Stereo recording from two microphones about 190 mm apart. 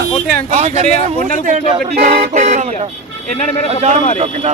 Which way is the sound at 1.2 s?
45° right (ahead or behind).